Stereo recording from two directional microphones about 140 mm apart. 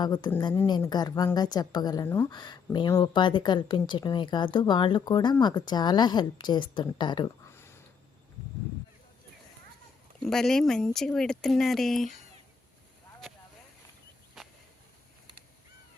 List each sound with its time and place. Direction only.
0.0 s a woman's voice: 30° left (ahead or behind)
10.2 s speech: 5° left (ahead or behind)
14.4 s a sound: 5° right (ahead or behind)